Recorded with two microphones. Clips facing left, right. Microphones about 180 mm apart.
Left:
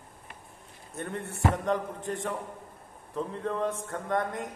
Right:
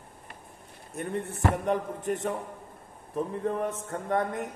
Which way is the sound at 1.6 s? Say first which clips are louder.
Right 2 dB; 20° right (ahead or behind).